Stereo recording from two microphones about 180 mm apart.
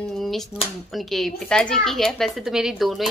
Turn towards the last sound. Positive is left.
turn(degrees=0)  # may be behind; listen again after turning